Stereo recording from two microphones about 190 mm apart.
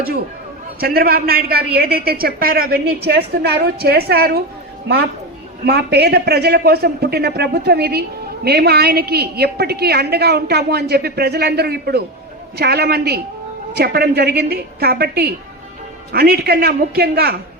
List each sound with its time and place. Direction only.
0.8 s a man's voice: 50° right (ahead or behind)
5.6 s a man's voice: 60° right (ahead or behind)